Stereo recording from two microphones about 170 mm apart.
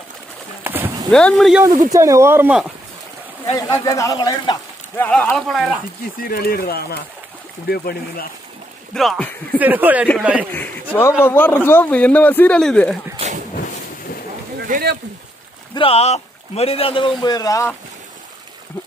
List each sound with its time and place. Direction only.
0.7 s clip-clop: 10° right (ahead or behind)
1.1 s speech: centre (ahead or behind)
1.9 s speech: 20° right (ahead or behind)
3.5 s speech: 20° left (ahead or behind)
5.0 s speech: 5° left (ahead or behind)
6.2 s speech: 60° left (ahead or behind)
8.9 s speech: centre (ahead or behind)
9.6 s speech: 10° right (ahead or behind)
10.5 s speech: 10° left (ahead or behind)
14.7 s speech: 65° right (ahead or behind)
15.7 s speech: 35° left (ahead or behind); by 17.7 s 20° left (ahead or behind)